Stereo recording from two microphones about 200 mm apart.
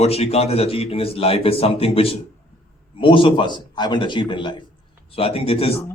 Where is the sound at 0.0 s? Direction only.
30° left (ahead or behind).